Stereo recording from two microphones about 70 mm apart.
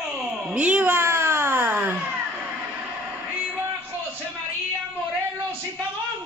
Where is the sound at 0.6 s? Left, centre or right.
Centre.